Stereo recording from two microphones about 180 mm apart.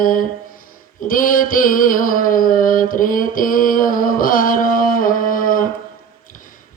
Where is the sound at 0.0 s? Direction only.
50° left (ahead or behind).